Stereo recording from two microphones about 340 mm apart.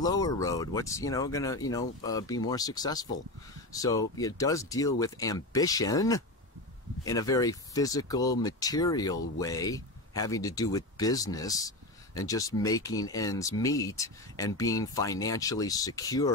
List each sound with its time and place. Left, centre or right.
0.0 s speech: centre